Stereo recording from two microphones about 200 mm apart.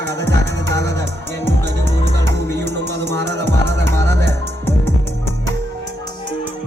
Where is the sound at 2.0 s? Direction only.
60° right (ahead or behind).